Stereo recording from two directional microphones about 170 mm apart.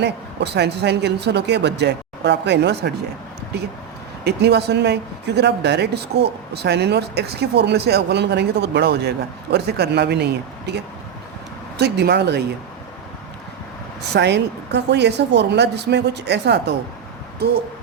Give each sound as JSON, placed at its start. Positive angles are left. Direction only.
{"t": 0.0, "sound": "speech", "side_deg": -80}
{"t": 4.2, "sound": "speech", "side_deg": -75}
{"t": 14.1, "sound": "speech", "side_deg": -85}